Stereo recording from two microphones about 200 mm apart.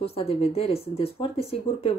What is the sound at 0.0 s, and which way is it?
Speech, 30° left (ahead or behind).